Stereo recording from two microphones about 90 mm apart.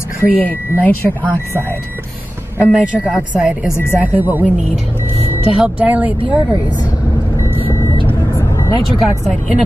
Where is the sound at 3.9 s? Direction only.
20° right (ahead or behind).